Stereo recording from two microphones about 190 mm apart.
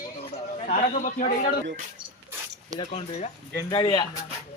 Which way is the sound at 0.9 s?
45° left (ahead or behind).